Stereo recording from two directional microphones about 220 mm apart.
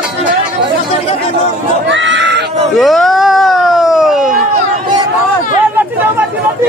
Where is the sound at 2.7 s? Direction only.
Centre (ahead or behind).